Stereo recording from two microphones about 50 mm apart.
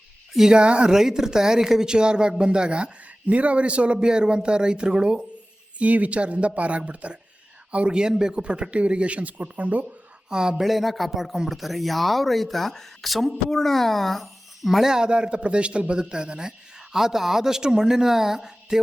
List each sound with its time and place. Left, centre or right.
0.3 s a man's voice: centre
5.8 s a man's voice: right
10.2 s speech: centre